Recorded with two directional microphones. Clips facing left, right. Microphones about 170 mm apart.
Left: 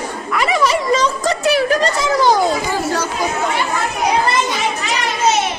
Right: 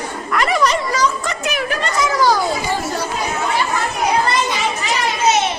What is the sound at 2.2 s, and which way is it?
Speech, 20° left (ahead or behind).